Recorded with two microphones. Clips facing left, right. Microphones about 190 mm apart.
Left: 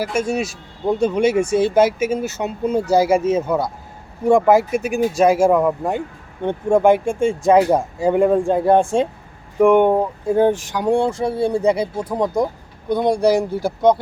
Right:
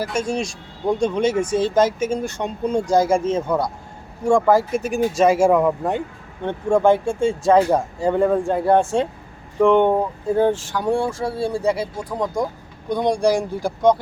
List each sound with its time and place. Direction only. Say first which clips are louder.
0.0 s speech: left 2 dB; 10° left (ahead or behind)
4.3 s speech: left 2 dB; 20° left (ahead or behind); by 6.0 s centre (ahead or behind)
6.4 s speech: left 2 dB; 15° left (ahead or behind)
12.9 s speech: left 2 dB; 5° left (ahead or behind)